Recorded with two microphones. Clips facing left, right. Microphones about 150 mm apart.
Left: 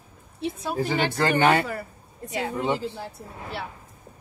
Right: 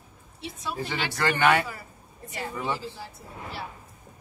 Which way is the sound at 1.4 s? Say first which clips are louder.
Left 1 dB; 30° left (ahead or behind).